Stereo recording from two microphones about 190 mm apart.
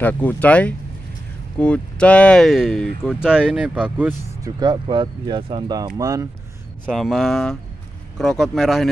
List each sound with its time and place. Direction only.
0.0 s speech: 10° left (ahead or behind); by 4.5 s 10° right (ahead or behind)
4.6 s speech: 25° right (ahead or behind)
6.9 s speech: centre (ahead or behind)